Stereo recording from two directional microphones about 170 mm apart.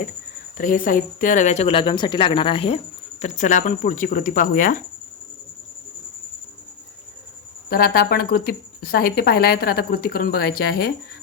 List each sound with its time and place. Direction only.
0.5 s a woman's voice: 50° left (ahead or behind)
7.7 s a woman's voice: 60° left (ahead or behind)